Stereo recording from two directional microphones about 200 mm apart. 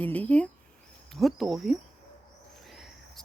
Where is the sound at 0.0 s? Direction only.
5° left (ahead or behind).